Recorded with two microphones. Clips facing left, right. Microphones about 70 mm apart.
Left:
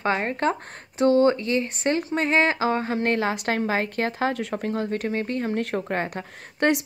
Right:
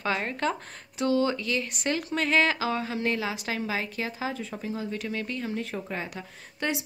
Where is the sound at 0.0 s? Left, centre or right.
Left.